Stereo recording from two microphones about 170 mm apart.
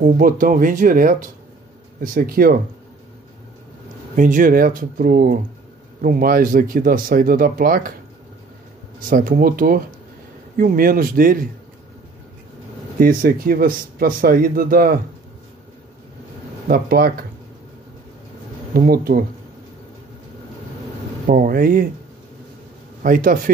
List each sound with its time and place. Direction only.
0.0 s speech: 50° right (ahead or behind)
4.2 s speech: 55° right (ahead or behind)
9.0 s speech: 55° right (ahead or behind)
13.0 s speech: 55° right (ahead or behind)
16.6 s speech: 60° right (ahead or behind)
18.7 s speech: 60° right (ahead or behind)
21.3 s speech: 55° right (ahead or behind)
23.0 s speech: 55° right (ahead or behind)